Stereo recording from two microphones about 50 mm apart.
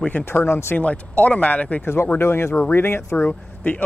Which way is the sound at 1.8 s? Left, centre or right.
Left.